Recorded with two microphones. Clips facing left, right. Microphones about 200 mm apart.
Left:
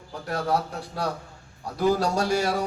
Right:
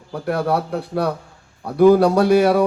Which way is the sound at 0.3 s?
60° right (ahead or behind).